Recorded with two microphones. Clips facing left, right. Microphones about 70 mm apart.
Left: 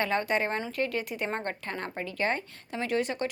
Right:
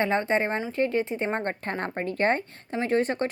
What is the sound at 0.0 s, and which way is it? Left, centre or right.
A woman's voice, right.